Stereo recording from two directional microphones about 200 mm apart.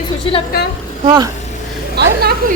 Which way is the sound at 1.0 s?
20° right (ahead or behind).